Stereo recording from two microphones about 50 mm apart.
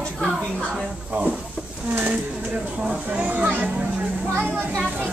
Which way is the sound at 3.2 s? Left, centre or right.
Right.